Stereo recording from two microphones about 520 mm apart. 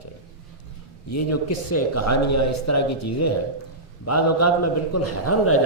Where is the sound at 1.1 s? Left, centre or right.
Left.